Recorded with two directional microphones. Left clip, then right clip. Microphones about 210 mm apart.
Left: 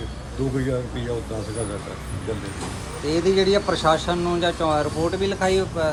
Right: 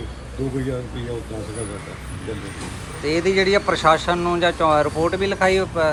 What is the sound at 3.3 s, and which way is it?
Speech, 15° left (ahead or behind).